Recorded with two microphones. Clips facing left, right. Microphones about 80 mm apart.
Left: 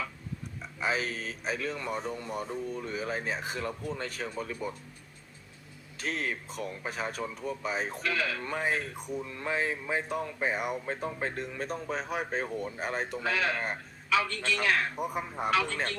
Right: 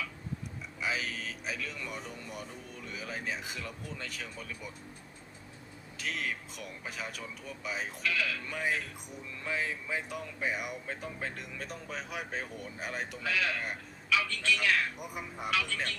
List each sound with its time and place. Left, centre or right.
0.8 s speech: left
6.0 s speech: left